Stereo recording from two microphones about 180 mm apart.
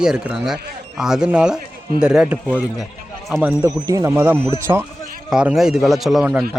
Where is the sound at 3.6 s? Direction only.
20° right (ahead or behind).